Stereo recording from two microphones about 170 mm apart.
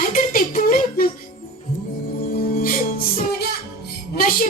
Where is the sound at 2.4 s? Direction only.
50° left (ahead or behind).